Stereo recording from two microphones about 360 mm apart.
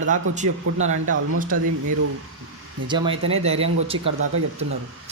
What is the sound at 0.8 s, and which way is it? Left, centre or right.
Speech, right.